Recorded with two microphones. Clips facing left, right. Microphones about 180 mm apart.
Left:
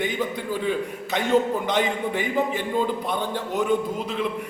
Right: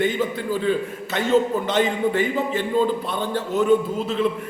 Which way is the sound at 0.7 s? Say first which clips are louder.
Right 2 dB; 15° left (ahead or behind).